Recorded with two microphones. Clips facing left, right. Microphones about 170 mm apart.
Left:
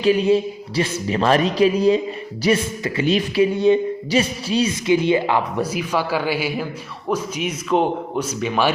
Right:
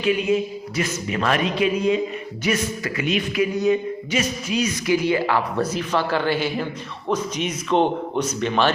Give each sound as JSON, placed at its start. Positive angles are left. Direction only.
{"t": 0.0, "sound": "speech", "side_deg": 35}